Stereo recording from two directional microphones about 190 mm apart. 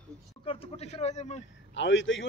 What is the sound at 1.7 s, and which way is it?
Speech, 75° left (ahead or behind).